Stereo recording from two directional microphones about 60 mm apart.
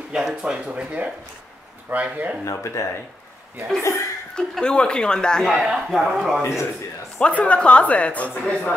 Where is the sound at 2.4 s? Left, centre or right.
Left.